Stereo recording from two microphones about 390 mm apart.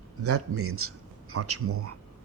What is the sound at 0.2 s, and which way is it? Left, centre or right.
A man's voice, right.